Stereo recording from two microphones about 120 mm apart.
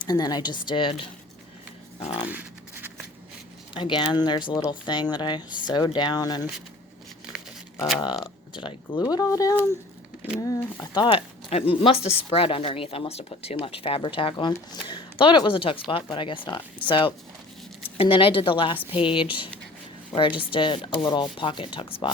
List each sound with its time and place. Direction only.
0.0 s speech: 35° left (ahead or behind)
2.3 s zipper: 15° right (ahead or behind)
3.8 s speech: 45° left (ahead or behind)
8.0 s speech: 40° left (ahead or behind)
11.0 s speech: 50° left (ahead or behind)